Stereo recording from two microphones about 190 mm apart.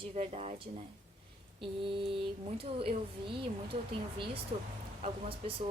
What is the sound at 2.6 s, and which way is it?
A woman's voice, 30° right (ahead or behind).